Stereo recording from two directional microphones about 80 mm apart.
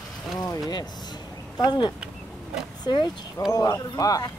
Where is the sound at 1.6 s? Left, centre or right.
Left.